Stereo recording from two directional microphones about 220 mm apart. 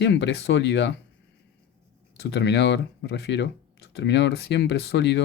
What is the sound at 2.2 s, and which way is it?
Speech, 50° left (ahead or behind).